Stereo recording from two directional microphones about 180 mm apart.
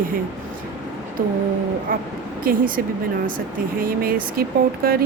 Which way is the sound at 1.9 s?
55° right (ahead or behind).